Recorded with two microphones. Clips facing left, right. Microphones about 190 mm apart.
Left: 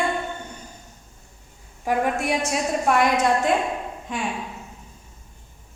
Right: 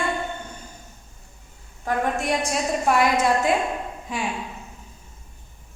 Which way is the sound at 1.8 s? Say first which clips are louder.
Left 2 dB; 10° left (ahead or behind).